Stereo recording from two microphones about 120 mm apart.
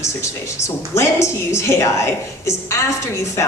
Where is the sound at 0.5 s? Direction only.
25° left (ahead or behind).